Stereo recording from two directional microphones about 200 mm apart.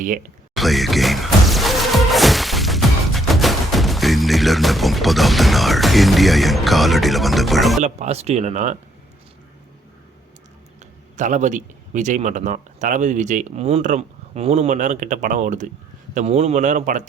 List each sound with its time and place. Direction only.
0.5 s music: centre (ahead or behind)
7.8 s speech: 35° right (ahead or behind)
11.2 s speech: 40° right (ahead or behind)